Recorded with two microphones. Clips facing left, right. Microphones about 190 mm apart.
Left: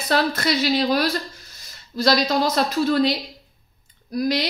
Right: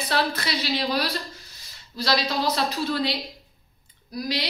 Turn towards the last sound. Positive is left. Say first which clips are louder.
# left 7 dB
turn(degrees=50)  # may be behind; listen again after turning